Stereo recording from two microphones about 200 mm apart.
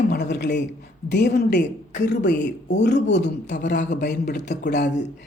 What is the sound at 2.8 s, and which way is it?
Speech, 60° left (ahead or behind).